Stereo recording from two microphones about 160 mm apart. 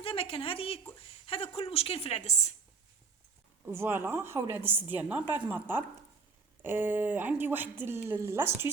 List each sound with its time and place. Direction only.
0.0 s a woman's voice: 35° left (ahead or behind)
3.7 s a woman's voice: 15° right (ahead or behind)